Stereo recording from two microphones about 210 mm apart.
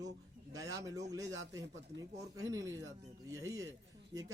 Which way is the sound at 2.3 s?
15° right (ahead or behind).